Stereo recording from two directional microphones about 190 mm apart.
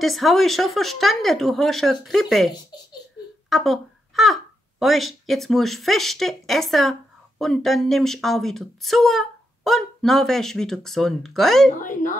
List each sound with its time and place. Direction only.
0.0 s speech: centre (ahead or behind)
2.5 s a child's voice: 20° left (ahead or behind)
3.4 s speech: centre (ahead or behind)
11.8 s a woman's voice: 45° left (ahead or behind)